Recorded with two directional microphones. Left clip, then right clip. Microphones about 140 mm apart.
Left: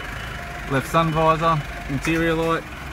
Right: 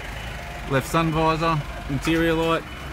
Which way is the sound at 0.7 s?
30° right (ahead or behind).